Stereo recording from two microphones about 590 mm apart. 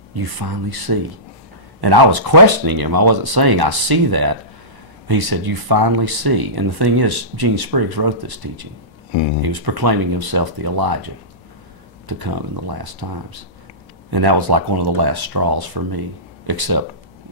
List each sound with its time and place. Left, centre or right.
0.1 s speech: right
9.4 s speech: right
12.1 s speech: right